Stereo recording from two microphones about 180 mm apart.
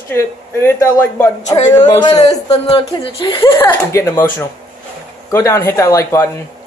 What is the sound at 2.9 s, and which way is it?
Speech, 25° left (ahead or behind).